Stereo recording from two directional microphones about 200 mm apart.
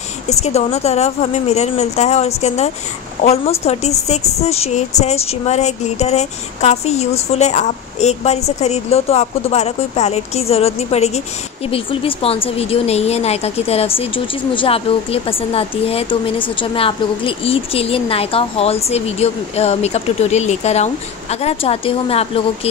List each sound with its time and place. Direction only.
0.3 s speech: 30° left (ahead or behind)